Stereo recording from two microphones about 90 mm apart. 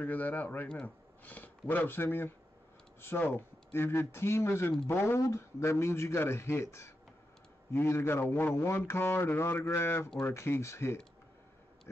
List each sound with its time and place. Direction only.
0.0 s a man's voice: 20° left (ahead or behind)